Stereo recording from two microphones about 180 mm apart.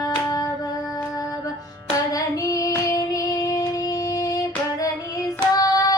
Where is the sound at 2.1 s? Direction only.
20° left (ahead or behind).